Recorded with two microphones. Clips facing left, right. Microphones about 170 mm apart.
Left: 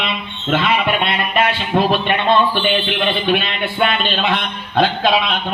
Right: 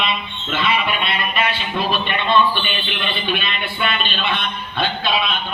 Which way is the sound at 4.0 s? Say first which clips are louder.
Left 4 dB; 90° left.